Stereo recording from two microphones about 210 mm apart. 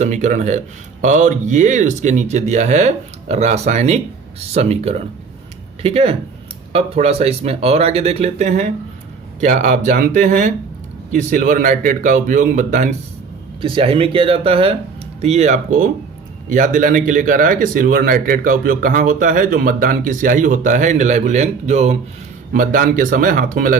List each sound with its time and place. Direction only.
0.0 s speech: 35° right (ahead or behind)
13.6 s speech: 25° right (ahead or behind); by 23.7 s 40° right (ahead or behind)